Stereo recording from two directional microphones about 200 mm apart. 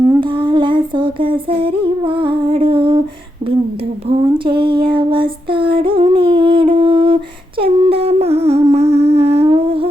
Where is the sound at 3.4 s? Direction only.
30° right (ahead or behind).